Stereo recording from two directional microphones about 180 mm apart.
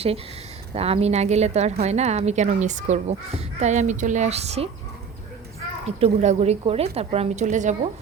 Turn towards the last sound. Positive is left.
turn(degrees=-40)  # may be behind; listen again after turning